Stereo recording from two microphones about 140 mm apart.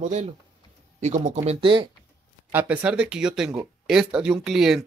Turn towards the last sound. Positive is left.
turn(degrees=0)  # may be behind; listen again after turning